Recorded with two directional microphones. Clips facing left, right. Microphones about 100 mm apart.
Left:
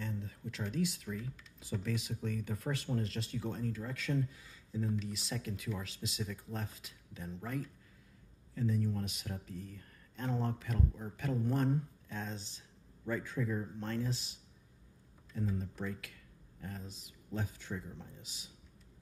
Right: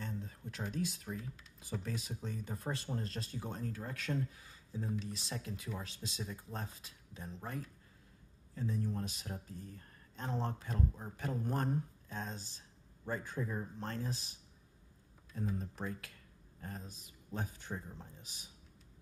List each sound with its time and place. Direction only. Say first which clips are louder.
0.0 s a sound: left 2 dB; 35° right (ahead or behind)
0.7 s speech: left 4 dB; 40° right (ahead or behind)
15.6 s speech: left 1 dB; 35° right (ahead or behind)